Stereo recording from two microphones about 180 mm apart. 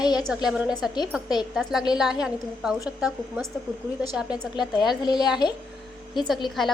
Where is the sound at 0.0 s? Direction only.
25° left (ahead or behind).